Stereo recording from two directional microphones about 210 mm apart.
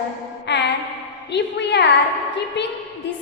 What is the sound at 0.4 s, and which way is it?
Music, 55° left (ahead or behind).